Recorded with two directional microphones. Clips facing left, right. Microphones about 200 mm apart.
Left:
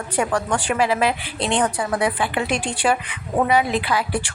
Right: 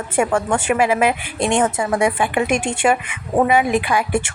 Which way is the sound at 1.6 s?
25° right (ahead or behind).